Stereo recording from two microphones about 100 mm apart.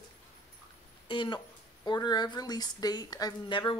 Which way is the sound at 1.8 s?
45° left (ahead or behind).